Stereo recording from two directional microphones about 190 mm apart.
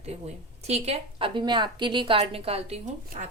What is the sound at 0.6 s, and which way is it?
A woman's voice, 35° right (ahead or behind).